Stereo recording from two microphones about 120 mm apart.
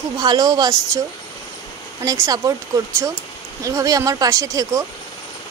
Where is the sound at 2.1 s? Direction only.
30° right (ahead or behind).